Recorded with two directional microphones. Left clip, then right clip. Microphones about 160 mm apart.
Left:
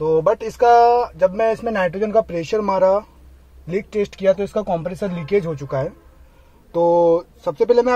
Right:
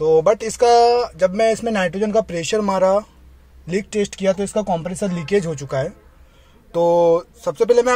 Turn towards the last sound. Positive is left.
turn(degrees=-5)  # may be behind; listen again after turning